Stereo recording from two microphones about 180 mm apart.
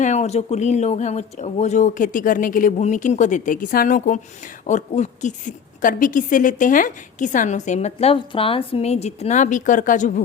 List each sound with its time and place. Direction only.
0.0 s a woman's voice: 40° left (ahead or behind)